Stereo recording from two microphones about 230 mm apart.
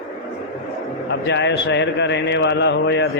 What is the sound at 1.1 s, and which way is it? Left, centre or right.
Speech, left.